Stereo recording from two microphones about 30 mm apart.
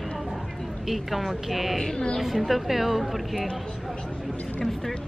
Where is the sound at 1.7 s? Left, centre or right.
Centre.